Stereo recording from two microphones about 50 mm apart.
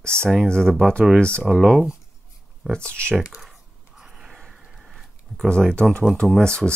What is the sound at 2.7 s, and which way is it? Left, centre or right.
Speech, left.